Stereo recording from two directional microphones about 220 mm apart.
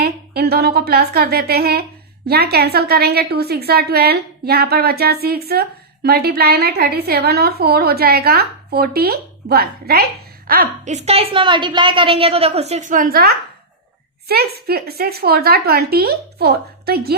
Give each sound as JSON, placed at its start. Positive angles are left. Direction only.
{"t": 0.0, "sound": "a woman's voice", "side_deg": -45}